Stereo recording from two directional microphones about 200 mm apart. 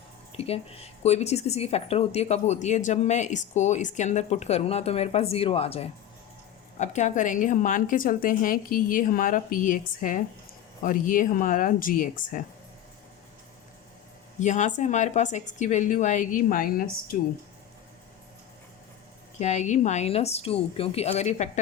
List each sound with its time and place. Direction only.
0.3 s speech: 30° left (ahead or behind)
14.3 s speech: 35° left (ahead or behind)
19.4 s speech: 35° left (ahead or behind)